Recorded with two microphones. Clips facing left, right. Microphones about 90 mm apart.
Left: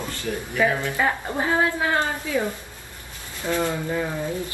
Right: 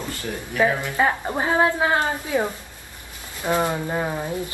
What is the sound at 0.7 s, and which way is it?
Speech, 20° right (ahead or behind).